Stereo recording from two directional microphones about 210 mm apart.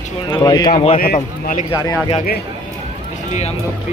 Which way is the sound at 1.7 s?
20° left (ahead or behind).